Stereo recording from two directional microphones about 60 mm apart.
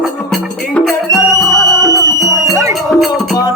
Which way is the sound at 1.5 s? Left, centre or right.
Left.